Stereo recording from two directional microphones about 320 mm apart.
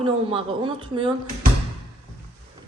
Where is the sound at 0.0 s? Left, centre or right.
Centre.